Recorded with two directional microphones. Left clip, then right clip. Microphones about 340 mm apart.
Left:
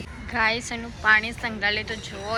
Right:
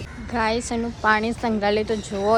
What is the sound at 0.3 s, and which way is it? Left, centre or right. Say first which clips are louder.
A woman's voice: right 1 dB; centre.